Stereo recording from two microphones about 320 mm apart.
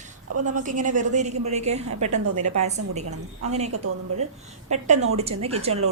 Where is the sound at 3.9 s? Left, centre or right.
Right.